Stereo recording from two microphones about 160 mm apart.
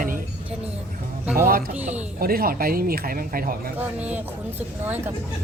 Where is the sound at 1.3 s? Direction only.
65° right (ahead or behind).